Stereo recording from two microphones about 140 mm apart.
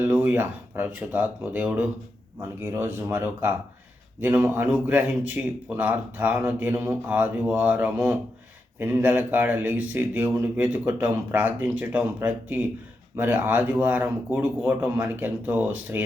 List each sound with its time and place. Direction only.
0.0 s a man's voice: 15° right (ahead or behind)